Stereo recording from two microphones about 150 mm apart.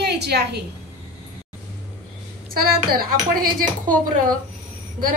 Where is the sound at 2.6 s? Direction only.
80° right.